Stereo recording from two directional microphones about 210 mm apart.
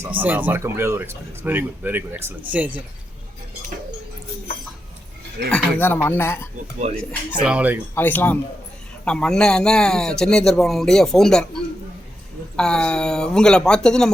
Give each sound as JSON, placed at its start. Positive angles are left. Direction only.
{"t": 0.2, "sound": "speech", "side_deg": -10}
{"t": 5.5, "sound": "speech", "side_deg": 5}
{"t": 6.7, "sound": "speech", "side_deg": -35}
{"t": 7.0, "sound": "speech", "side_deg": 5}
{"t": 7.3, "sound": "a man's voice", "side_deg": -5}
{"t": 7.9, "sound": "a man's voice", "side_deg": 10}